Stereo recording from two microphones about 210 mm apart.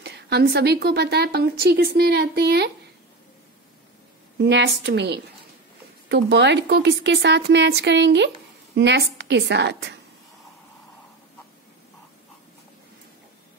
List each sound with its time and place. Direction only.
0.0 s a woman's voice: 55° right (ahead or behind)
4.4 s speech: 55° right (ahead or behind)